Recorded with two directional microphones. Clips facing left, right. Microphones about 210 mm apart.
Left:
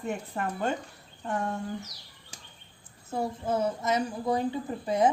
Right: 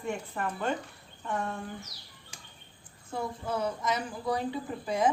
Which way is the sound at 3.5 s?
25° left (ahead or behind).